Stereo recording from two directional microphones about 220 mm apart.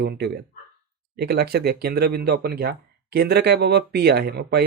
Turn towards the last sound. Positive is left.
turn(degrees=-45)  # may be behind; listen again after turning